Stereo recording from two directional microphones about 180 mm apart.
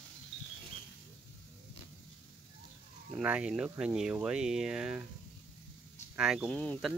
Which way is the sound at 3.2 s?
5° right (ahead or behind).